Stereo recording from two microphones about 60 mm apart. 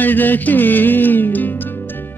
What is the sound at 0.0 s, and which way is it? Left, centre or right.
Music, left.